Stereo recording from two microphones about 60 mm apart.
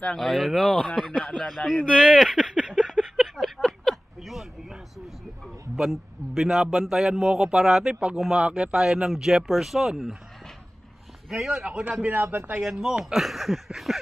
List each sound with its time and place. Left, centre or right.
0.1 s speech: centre
1.9 s a sound: centre
5.8 s a man's voice: centre
11.2 s a man's voice: centre
12.2 s a man's voice: right
12.5 s speech: centre